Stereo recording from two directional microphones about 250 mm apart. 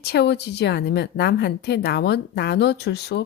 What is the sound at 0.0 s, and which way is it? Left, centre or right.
Speech, left.